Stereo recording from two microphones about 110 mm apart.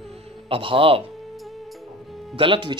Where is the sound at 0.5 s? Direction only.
55° right (ahead or behind).